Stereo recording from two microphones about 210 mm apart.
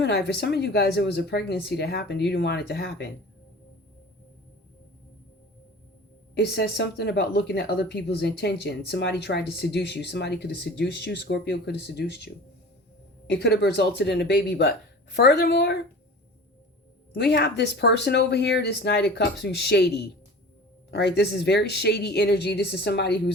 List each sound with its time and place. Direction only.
0.0 s speech: 50° left (ahead or behind)
6.3 s speech: 50° left (ahead or behind)
13.3 s speech: 50° left (ahead or behind)
17.2 s speech: 50° left (ahead or behind)